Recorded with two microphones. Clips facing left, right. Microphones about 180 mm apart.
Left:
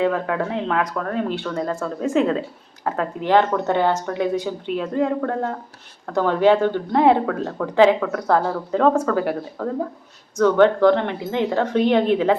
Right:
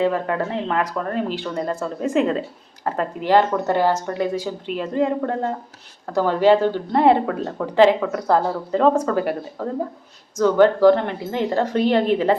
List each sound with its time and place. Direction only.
0.0 s a woman's voice: centre (ahead or behind)